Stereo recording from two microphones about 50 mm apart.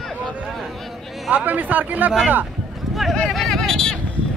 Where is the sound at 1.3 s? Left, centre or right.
Right.